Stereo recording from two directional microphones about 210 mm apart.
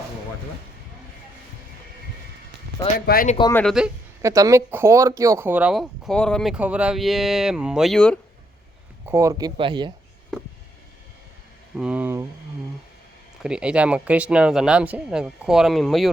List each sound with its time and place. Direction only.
3.1 s speech: 45° left (ahead or behind)
3.5 s speech: 5° left (ahead or behind)
4.2 s speech: 15° right (ahead or behind); by 8.2 s 5° left (ahead or behind)
9.0 s speech: 15° right (ahead or behind)
11.8 s speech: 5° right (ahead or behind)
13.4 s speech: 5° right (ahead or behind)